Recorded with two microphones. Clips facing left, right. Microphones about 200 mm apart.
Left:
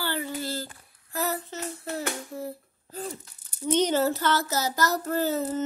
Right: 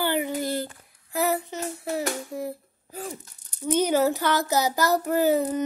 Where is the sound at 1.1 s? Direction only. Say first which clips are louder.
Right 5 dB; 15° right (ahead or behind).